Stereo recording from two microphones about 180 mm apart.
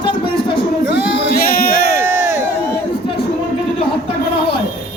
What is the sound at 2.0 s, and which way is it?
Crowd, 15° right (ahead or behind).